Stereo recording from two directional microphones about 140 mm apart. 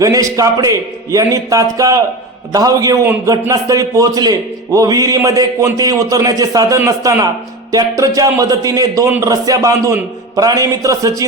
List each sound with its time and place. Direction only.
0.0 s a man's voice: 25° right (ahead or behind)